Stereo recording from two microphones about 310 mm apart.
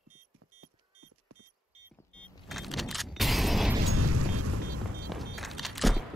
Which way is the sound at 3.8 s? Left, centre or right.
Right.